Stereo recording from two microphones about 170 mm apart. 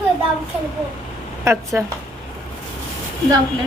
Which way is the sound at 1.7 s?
15° right (ahead or behind).